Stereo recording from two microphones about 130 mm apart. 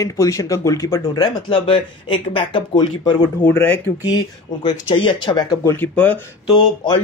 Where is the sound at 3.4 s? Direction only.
10° left (ahead or behind).